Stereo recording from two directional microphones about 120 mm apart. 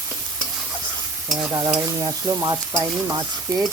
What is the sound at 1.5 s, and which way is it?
Stir, 30° right (ahead or behind).